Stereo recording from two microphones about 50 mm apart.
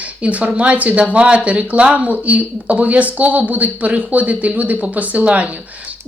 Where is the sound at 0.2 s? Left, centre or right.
Right.